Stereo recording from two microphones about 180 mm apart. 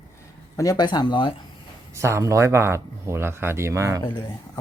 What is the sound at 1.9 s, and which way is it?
Speech, 15° right (ahead or behind).